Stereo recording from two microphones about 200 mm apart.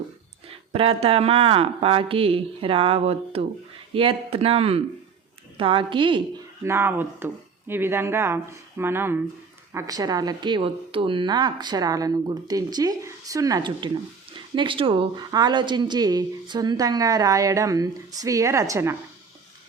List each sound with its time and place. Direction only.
0.4 s a woman's voice: 30° right (ahead or behind)
6.6 s a woman's voice: 15° right (ahead or behind)